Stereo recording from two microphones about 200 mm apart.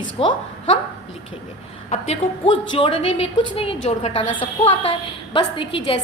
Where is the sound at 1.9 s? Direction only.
30° left (ahead or behind).